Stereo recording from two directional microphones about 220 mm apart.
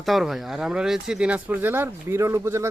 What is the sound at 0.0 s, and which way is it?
Speech, centre (ahead or behind).